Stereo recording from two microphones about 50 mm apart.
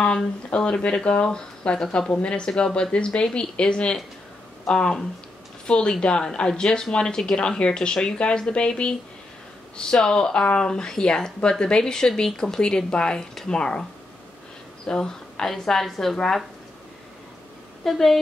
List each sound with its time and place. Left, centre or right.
0.0 s speech: centre
14.9 s speech: centre
17.8 s a woman's voice: centre